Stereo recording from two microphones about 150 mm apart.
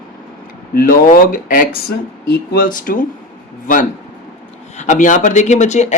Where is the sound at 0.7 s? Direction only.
70° left (ahead or behind).